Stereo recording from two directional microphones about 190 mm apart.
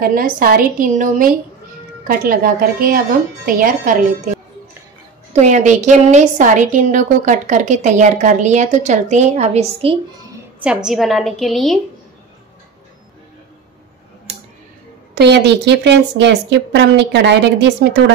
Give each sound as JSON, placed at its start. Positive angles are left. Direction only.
{"t": 0.0, "sound": "a woman's voice", "side_deg": -50}
{"t": 5.3, "sound": "a woman's voice", "side_deg": -40}
{"t": 10.6, "sound": "a woman's voice", "side_deg": -5}
{"t": 15.1, "sound": "a woman's voice", "side_deg": -60}